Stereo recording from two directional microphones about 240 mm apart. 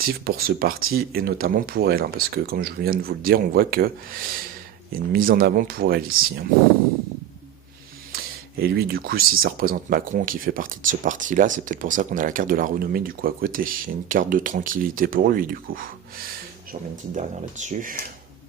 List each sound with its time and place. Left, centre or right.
0.0 s speech: right
8.1 s a sound: right
9.4 s speech: right